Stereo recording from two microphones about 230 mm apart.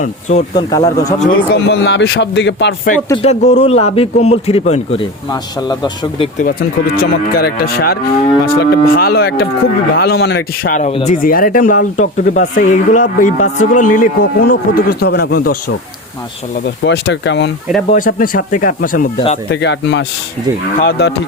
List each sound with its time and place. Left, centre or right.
0.0 s speech: left
0.5 s speech: centre
1.3 s speech: left
3.1 s a man's voice: left
6.4 s speech: left
10.8 s speech: left
16.6 s speech: left
17.8 s speech: left
19.5 s speech: left